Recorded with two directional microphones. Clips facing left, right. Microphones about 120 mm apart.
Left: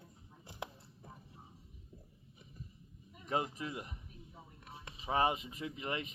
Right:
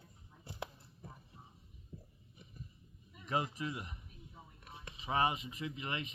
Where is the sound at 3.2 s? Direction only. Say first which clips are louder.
Even; 40° left (ahead or behind).